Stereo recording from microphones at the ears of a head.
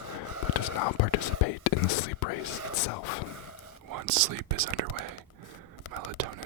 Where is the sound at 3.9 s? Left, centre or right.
Right.